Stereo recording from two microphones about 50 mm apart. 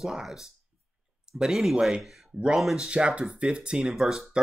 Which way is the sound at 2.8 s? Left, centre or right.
Centre.